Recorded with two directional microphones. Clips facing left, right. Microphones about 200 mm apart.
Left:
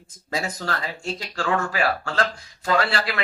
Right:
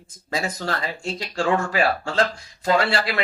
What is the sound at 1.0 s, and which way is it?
A man's voice, 25° right (ahead or behind).